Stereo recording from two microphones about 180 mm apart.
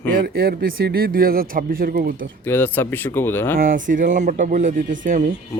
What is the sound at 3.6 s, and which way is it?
Speech, 50° right (ahead or behind).